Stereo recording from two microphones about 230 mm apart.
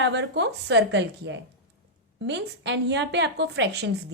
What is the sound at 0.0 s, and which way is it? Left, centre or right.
Speech, right.